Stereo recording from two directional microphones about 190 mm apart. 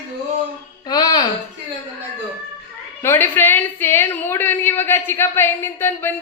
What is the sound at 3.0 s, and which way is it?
A woman's voice, 10° left (ahead or behind).